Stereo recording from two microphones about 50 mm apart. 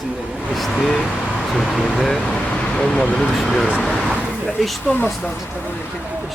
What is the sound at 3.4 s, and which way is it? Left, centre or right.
Speech, centre.